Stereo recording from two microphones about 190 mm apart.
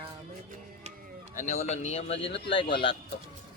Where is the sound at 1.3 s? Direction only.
40° left (ahead or behind).